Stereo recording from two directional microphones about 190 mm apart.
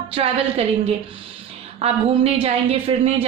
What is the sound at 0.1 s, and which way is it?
A woman's voice, 30° right (ahead or behind).